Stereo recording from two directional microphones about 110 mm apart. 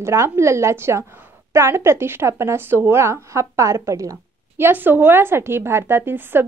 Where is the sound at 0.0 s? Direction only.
25° right (ahead or behind).